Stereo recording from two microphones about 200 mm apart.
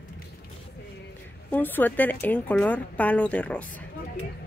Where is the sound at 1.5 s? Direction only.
10° left (ahead or behind).